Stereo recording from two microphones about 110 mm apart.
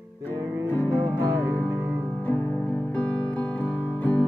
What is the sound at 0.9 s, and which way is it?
Music, 20° right (ahead or behind).